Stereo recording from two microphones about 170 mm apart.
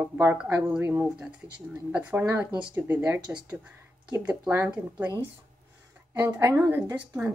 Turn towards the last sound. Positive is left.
turn(degrees=-10)  # may be behind; listen again after turning